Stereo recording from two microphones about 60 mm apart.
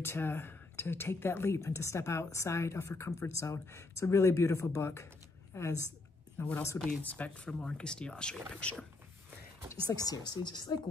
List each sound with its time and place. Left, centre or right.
0.0 s speech: left
6.4 s speech: left
7.0 s speech: left
9.8 s a woman's voice: left